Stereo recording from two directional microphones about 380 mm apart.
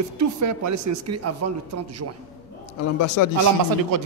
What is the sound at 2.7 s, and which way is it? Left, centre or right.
Speech, left.